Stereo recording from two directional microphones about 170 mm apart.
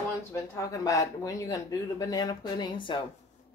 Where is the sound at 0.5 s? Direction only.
20° left (ahead or behind).